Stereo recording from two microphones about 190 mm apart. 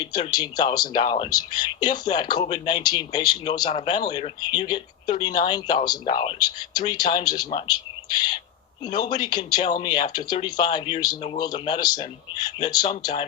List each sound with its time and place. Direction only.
0.0 s speech: 20° left (ahead or behind)